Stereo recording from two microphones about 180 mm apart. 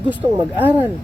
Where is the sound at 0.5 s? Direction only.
10° right (ahead or behind).